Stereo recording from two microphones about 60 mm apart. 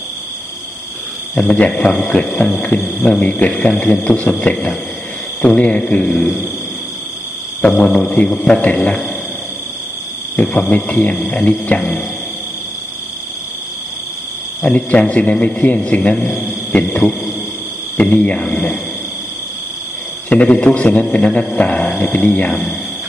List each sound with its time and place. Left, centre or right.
1.3 s speech: centre
7.8 s speech: centre
10.3 s speech: left
14.6 s speech: centre
20.2 s speech: left